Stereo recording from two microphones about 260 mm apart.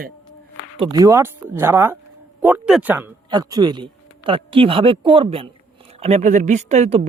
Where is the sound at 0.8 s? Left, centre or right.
Centre.